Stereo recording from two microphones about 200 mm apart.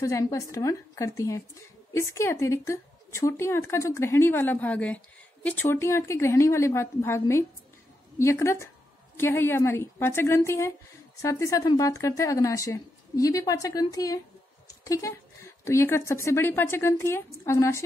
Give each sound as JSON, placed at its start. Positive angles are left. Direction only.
{"t": 0.0, "sound": "a woman's voice", "side_deg": 15}